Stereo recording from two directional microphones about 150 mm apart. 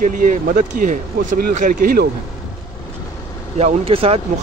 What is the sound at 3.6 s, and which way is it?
Speech, 45° right (ahead or behind).